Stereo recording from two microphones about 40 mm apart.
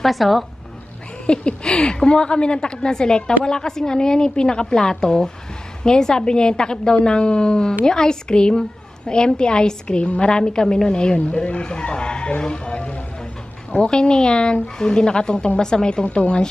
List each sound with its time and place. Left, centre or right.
0.0 s a woman's voice: centre
1.2 s a woman's voice: left